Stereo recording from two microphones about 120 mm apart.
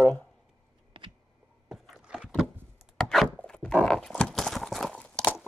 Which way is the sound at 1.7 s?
Centre (ahead or behind).